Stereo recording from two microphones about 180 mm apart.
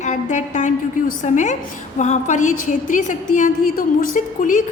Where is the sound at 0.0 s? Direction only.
40° left (ahead or behind).